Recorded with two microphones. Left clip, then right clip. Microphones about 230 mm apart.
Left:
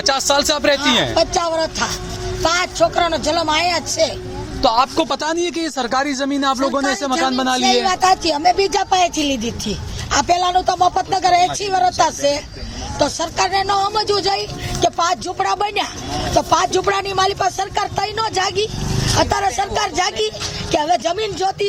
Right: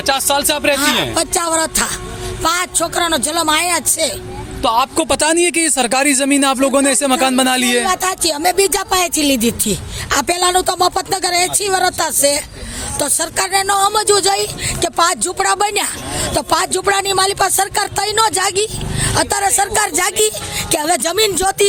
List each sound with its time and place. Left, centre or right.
0.0 s speech: centre
1.1 s speech: right